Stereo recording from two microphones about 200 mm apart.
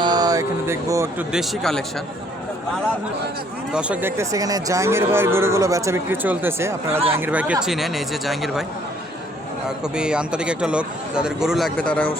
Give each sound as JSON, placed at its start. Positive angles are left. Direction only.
{"t": 0.0, "sound": "speech", "side_deg": -20}
{"t": 1.3, "sound": "speech", "side_deg": 0}
{"t": 3.7, "sound": "speech", "side_deg": -5}
{"t": 9.6, "sound": "speech", "side_deg": -5}